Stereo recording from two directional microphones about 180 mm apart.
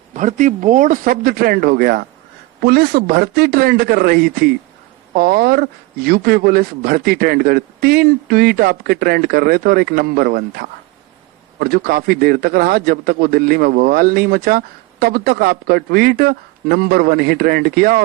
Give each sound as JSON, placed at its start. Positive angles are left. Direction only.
{"t": 0.1, "sound": "a man's voice", "side_deg": -40}